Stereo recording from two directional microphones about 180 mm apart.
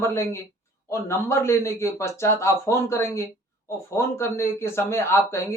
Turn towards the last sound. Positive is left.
turn(degrees=15)  # may be behind; listen again after turning